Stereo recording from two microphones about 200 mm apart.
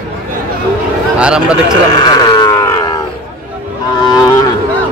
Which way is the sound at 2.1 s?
20° left (ahead or behind).